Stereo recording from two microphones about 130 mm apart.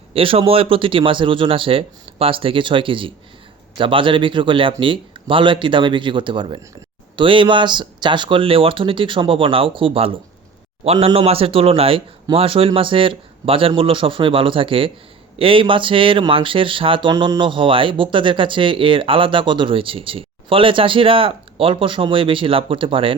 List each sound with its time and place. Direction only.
0.1 s speech: 45° right (ahead or behind)